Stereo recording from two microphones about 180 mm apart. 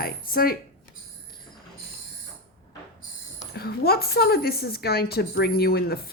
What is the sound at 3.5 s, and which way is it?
A woman's voice, 60° left (ahead or behind).